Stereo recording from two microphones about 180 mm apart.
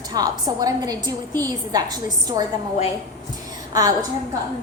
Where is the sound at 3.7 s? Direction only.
20° right (ahead or behind).